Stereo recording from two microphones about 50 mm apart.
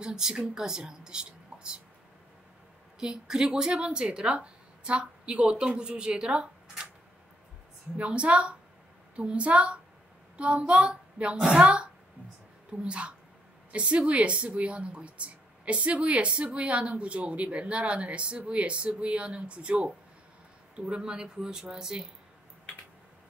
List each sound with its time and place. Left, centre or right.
0.0 s speech: centre
3.0 s a woman's voice: centre
8.0 s a woman's voice: right